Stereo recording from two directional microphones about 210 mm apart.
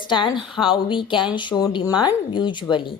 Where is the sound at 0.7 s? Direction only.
25° left (ahead or behind).